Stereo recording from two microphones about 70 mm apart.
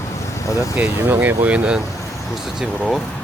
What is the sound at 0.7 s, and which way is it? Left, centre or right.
Speech, right.